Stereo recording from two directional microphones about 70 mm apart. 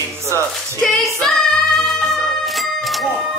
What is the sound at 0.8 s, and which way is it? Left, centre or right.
Speech, centre.